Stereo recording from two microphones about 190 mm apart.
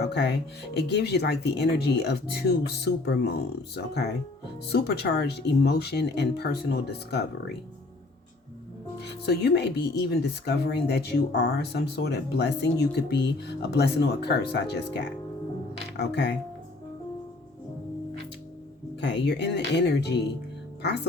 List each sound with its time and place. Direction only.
0.0 s speech: 60° left (ahead or behind)
9.0 s speech: 60° left (ahead or behind)
18.9 s speech: 65° left (ahead or behind)